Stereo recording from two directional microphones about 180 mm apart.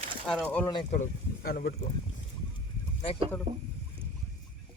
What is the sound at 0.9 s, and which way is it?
Speech, 55° left (ahead or behind).